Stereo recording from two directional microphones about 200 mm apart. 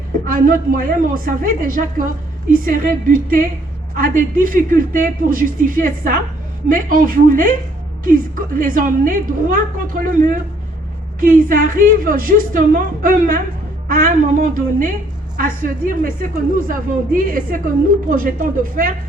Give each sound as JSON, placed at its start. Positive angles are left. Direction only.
{"t": 0.3, "sound": "a woman's voice", "side_deg": -45}